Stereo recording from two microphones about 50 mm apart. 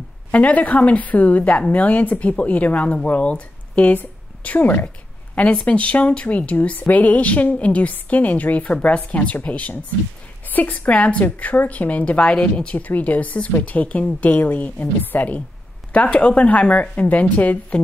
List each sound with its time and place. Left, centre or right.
0.3 s a woman's voice: left